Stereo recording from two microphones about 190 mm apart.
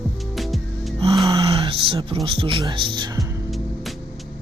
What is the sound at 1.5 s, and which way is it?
Speech, 30° right (ahead or behind).